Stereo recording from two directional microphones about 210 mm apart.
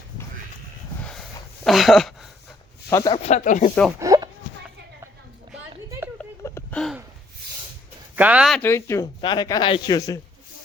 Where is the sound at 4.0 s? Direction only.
15° right (ahead or behind).